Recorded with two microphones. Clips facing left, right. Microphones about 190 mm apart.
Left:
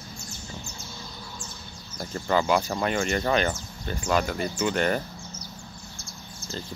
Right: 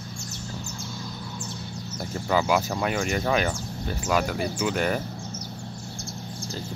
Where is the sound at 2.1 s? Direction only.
5° right (ahead or behind).